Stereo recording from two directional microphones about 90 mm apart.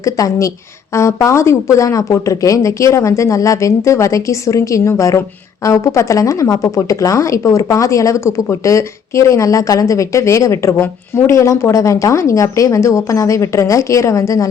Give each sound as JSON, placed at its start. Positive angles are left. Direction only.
{"t": 0.0, "sound": "a woman's voice", "side_deg": 40}